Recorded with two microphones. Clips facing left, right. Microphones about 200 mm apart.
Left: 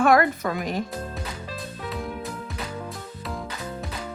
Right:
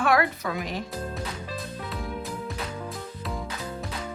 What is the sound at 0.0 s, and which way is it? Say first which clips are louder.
Speech: left 4 dB; 45° left (ahead or behind).